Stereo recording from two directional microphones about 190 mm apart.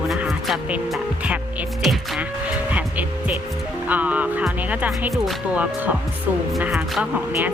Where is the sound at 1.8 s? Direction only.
Centre (ahead or behind).